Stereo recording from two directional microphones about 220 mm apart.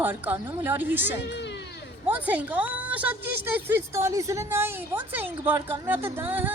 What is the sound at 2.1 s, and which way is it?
A woman's voice, 5° right (ahead or behind).